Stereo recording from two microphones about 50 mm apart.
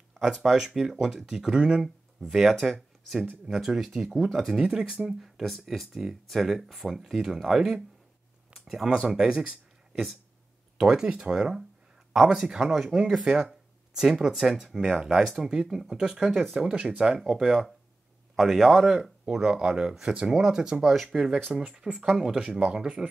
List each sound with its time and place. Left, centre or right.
0.2 s speech: centre
4.6 s speech: centre
5.2 s speech: centre
10.8 s speech: centre
19.2 s speech: centre